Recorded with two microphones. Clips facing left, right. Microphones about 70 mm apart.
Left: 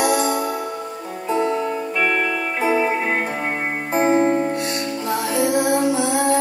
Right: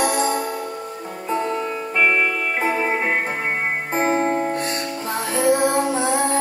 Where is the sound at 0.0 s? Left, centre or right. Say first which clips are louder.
Left 2 dB; right.